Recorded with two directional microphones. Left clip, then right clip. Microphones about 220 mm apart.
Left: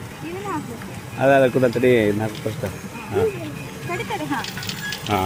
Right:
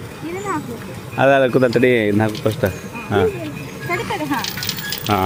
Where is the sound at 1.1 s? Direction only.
25° right (ahead or behind).